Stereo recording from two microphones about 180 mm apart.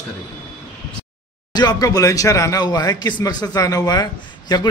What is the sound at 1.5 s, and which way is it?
Speech, 20° left (ahead or behind).